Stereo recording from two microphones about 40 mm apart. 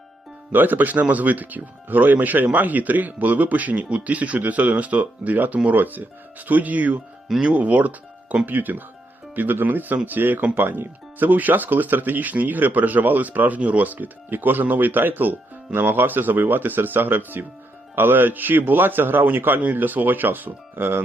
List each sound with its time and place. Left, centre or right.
0.5 s a man's voice: right